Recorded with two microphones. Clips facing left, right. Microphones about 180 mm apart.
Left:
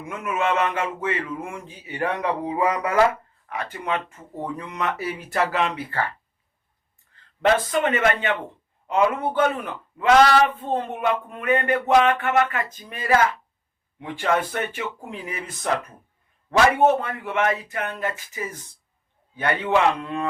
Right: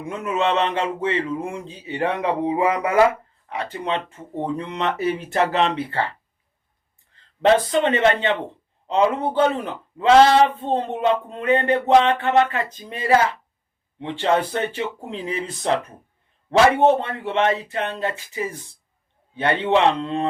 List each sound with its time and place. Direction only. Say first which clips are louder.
0.0 s speech: right 3 dB; 35° right (ahead or behind)
7.4 s speech: right 3 dB; 25° right (ahead or behind)